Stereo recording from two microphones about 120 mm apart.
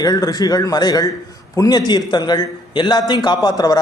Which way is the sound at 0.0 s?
30° left (ahead or behind).